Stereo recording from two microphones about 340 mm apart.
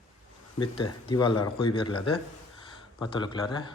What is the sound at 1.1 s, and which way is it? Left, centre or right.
Speech, centre.